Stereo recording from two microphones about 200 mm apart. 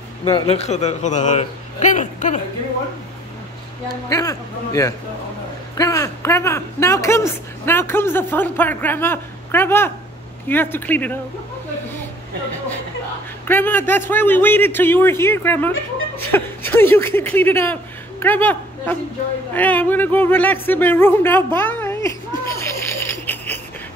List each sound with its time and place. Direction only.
0.2 s a man's voice: 30° left (ahead or behind)
3.9 s speech: 15° left (ahead or behind)
13.5 s speech: 10° left (ahead or behind)
19.5 s a sound: 10° left (ahead or behind)